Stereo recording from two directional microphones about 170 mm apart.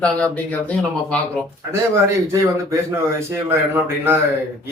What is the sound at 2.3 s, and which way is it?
A man's voice, 15° right (ahead or behind).